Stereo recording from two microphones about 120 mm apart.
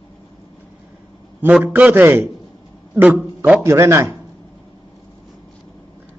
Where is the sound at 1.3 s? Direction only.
15° right (ahead or behind).